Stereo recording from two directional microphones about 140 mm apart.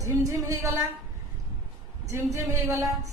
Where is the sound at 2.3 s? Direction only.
20° right (ahead or behind).